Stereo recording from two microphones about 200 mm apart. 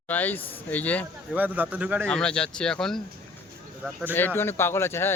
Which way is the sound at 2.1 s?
5° left (ahead or behind).